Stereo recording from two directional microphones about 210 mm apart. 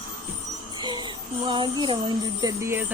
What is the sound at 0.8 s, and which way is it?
Speech, 20° right (ahead or behind).